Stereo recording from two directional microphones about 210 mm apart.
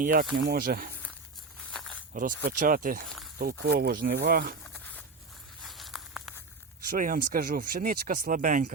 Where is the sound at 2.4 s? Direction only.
40° right (ahead or behind).